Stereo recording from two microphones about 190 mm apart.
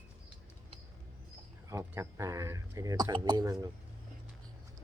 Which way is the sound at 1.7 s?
15° right (ahead or behind).